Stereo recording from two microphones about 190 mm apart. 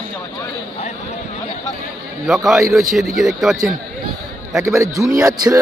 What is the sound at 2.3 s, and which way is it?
A man's voice, centre (ahead or behind).